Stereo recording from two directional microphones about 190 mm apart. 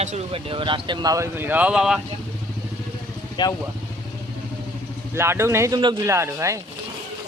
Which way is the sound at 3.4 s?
25° left (ahead or behind).